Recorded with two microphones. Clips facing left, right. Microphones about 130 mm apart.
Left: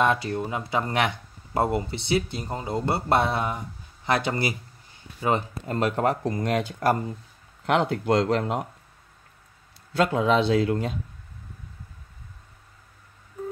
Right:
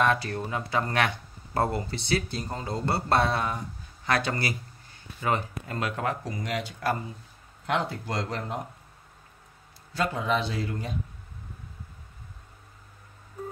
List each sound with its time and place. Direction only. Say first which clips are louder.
0.0 s speech: left 2 dB; 20° left (ahead or behind)
6.2 s speech: left 7 dB; 50° left (ahead or behind)
7.6 s speech: left 6 dB; 60° left (ahead or behind)
9.9 s speech: left 6 dB; 60° left (ahead or behind)